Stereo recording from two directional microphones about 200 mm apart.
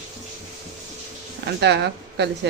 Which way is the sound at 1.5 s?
55° right (ahead or behind).